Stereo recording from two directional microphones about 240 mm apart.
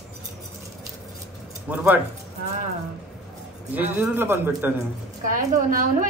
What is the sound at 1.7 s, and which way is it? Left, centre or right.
Speech, centre.